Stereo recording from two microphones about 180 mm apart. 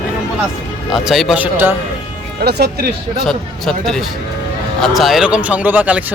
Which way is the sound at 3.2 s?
Centre (ahead or behind).